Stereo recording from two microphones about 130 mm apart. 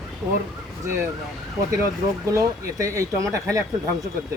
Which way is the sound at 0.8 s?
20° right (ahead or behind).